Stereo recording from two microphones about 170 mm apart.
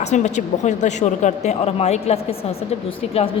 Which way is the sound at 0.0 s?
45° left (ahead or behind).